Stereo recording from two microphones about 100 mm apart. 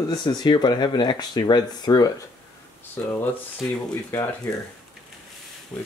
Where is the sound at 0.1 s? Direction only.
45° left (ahead or behind).